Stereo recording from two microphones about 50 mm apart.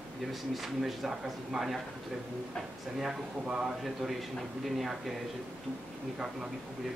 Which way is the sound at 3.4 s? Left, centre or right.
Centre.